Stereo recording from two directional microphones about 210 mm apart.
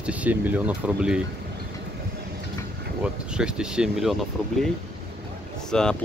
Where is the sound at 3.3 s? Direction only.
5° right (ahead or behind).